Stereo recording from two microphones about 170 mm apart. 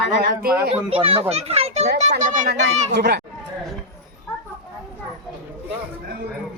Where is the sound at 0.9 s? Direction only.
35° right (ahead or behind).